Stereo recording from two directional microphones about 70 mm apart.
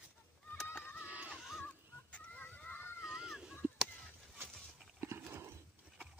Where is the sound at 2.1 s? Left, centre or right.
Left.